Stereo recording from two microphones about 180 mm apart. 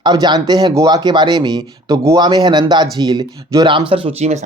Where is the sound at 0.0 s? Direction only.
25° right (ahead or behind).